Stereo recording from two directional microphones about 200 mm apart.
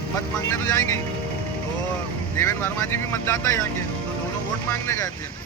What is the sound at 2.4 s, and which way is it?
Speech, 15° left (ahead or behind).